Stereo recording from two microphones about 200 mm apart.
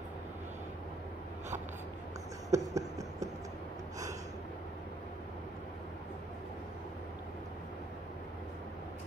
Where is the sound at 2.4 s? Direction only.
15° right (ahead or behind).